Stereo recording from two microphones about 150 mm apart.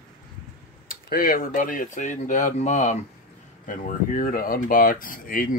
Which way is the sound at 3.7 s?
65° left (ahead or behind).